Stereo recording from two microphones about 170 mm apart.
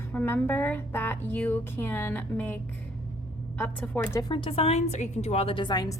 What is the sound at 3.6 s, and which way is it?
A woman's voice, 10° left (ahead or behind).